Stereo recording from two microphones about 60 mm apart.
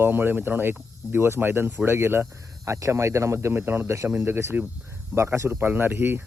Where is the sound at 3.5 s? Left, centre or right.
Right.